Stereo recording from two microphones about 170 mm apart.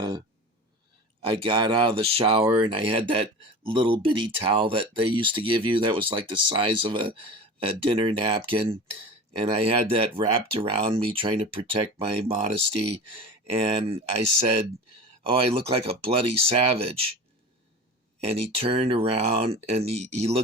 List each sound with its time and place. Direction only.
1.2 s speech: 30° right (ahead or behind)
18.3 s speech: 35° right (ahead or behind)